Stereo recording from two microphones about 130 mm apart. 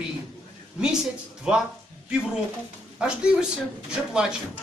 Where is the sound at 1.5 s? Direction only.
5° right (ahead or behind).